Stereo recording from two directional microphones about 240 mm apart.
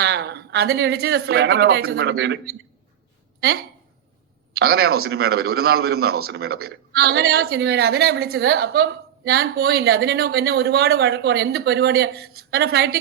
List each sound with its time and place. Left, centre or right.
0.0 s a man's voice: right